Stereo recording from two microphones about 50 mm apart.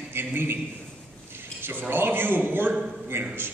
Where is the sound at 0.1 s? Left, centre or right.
Right.